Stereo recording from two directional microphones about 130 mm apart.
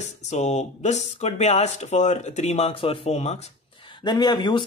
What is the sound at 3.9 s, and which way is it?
Speech, 35° left (ahead or behind).